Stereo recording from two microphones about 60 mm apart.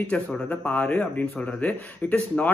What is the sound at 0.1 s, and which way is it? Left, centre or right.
Speech, left.